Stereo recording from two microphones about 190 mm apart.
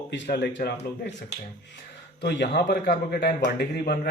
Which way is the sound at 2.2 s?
60° left (ahead or behind).